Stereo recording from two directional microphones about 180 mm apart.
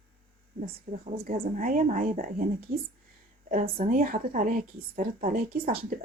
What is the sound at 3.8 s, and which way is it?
A woman's voice, 50° right (ahead or behind).